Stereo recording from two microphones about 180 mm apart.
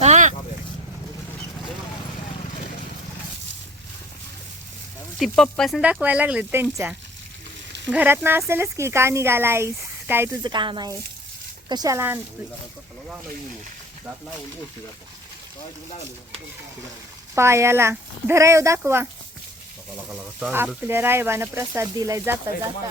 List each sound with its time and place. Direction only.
0.0 s vehicle: 40° right (ahead or behind)
5.4 s speech: centre (ahead or behind); by 10.2 s 15° right (ahead or behind)
10.4 s speech: 25° right (ahead or behind)
17.3 s speech: 15° right (ahead or behind)
20.8 s speech: 15° right (ahead or behind)